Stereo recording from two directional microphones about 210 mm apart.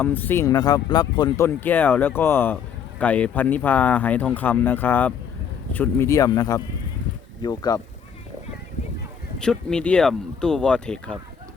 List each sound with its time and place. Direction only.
0.0 s speech: 10° left (ahead or behind)
1.5 s speech: 10° left (ahead or behind)
9.4 s speech: 5° left (ahead or behind)